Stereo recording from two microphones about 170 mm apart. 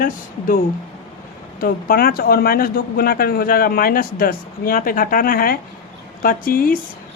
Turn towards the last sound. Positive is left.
turn(degrees=55)  # may be behind; listen again after turning